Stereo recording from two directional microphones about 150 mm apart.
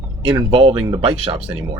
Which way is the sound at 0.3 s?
35° right (ahead or behind).